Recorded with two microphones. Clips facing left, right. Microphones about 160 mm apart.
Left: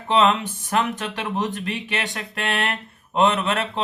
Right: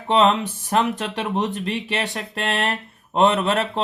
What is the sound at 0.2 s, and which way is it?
Speech, 30° right (ahead or behind).